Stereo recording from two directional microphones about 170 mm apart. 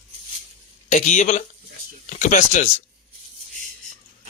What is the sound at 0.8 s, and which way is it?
Speech, 45° left (ahead or behind).